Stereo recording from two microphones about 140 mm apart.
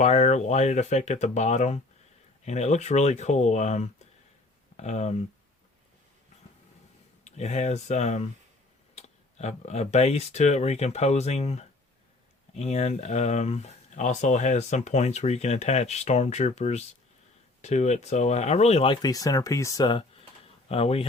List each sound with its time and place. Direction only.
0.0 s speech: 50° left (ahead or behind)
7.3 s speech: 55° left (ahead or behind)
19.0 s speech: 25° left (ahead or behind); by 21.1 s 45° left (ahead or behind)